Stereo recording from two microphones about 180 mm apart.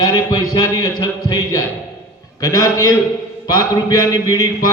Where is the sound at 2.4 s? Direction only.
20° left (ahead or behind).